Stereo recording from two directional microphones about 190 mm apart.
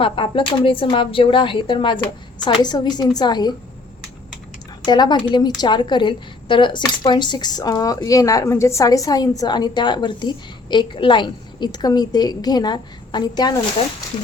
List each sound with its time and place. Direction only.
0.0 s a woman's voice: 25° left (ahead or behind)
4.9 s a woman's voice: 25° left (ahead or behind)